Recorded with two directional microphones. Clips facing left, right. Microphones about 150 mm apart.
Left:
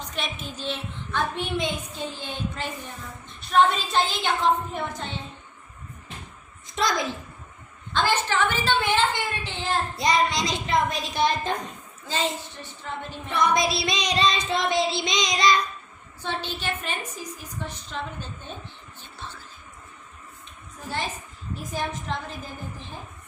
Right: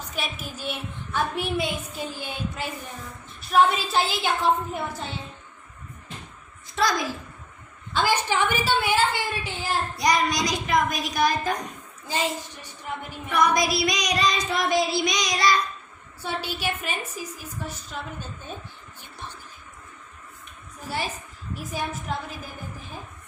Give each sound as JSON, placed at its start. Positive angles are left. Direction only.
{"t": 0.1, "sound": "a woman's voice", "side_deg": -5}
{"t": 6.7, "sound": "a child's voice", "side_deg": 20}
{"t": 7.9, "sound": "a woman's voice", "side_deg": -10}
{"t": 10.0, "sound": "child singing", "side_deg": 25}
{"t": 12.0, "sound": "a woman's voice", "side_deg": -15}
{"t": 13.3, "sound": "child singing", "side_deg": 25}
{"t": 16.2, "sound": "a woman's voice", "side_deg": -10}
{"t": 21.5, "sound": "a woman's voice", "side_deg": -10}